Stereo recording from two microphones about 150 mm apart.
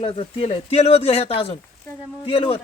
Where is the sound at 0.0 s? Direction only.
35° left (ahead or behind).